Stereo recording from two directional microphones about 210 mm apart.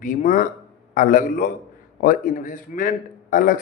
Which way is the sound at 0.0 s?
40° left (ahead or behind).